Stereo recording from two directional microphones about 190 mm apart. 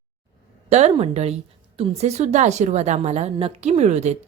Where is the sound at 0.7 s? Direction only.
35° right (ahead or behind).